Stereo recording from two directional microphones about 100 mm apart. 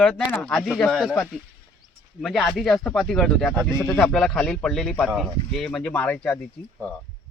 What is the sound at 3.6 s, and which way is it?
Speech, 20° left (ahead or behind).